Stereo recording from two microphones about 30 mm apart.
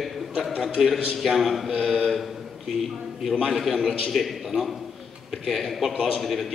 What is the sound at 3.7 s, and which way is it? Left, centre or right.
Speech, centre.